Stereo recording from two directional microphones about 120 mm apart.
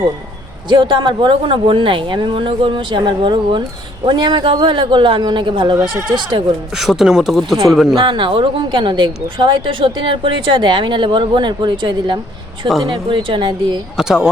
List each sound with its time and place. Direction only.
0.7 s a woman's voice: 40° right (ahead or behind)
6.7 s speech: 5° right (ahead or behind)
7.9 s a woman's voice: 40° right (ahead or behind)
13.9 s speech: 5° right (ahead or behind)